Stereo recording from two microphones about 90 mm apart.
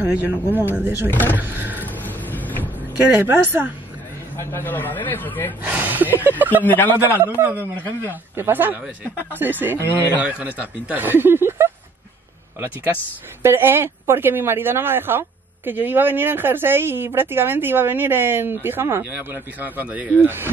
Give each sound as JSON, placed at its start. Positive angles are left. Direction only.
{"t": 0.0, "sound": "speech", "side_deg": -15}
{"t": 2.0, "sound": "vehicle", "side_deg": 20}
{"t": 3.0, "sound": "speech", "side_deg": -20}
{"t": 4.4, "sound": "speech", "side_deg": 25}
{"t": 5.6, "sound": "speech", "side_deg": -20}
{"t": 6.6, "sound": "speech", "side_deg": 20}
{"t": 7.3, "sound": "speech", "side_deg": -20}
{"t": 13.4, "sound": "speech", "side_deg": -25}